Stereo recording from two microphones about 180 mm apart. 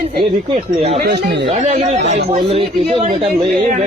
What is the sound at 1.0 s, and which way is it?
Speech, 60° right (ahead or behind).